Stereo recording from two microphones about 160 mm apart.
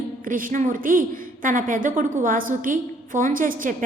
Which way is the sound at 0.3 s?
55° right (ahead or behind).